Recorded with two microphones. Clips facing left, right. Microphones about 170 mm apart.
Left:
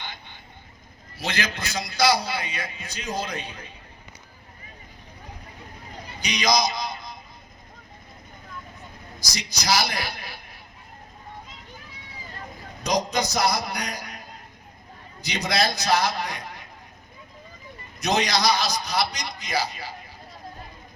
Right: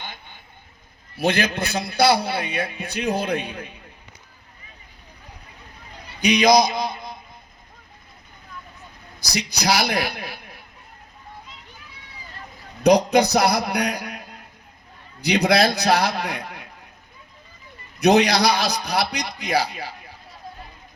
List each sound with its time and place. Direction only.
1.1 s a man's voice: 55° right (ahead or behind)
6.1 s a man's voice: 60° right (ahead or behind)
9.6 s a man's voice: 60° right (ahead or behind)
12.8 s a man's voice: 60° right (ahead or behind)
15.3 s a man's voice: 60° right (ahead or behind)
18.0 s a man's voice: 60° right (ahead or behind)